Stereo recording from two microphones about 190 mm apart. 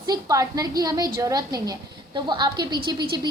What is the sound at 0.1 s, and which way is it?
A woman's voice, 20° right (ahead or behind).